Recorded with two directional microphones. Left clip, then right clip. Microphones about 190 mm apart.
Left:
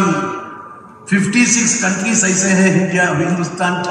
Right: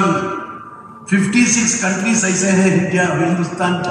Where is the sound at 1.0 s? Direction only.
35° left (ahead or behind).